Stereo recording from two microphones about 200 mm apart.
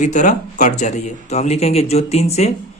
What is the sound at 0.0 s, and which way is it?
A man's voice, 40° left (ahead or behind).